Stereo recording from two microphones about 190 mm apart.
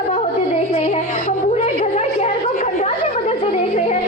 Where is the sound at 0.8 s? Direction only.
35° left (ahead or behind).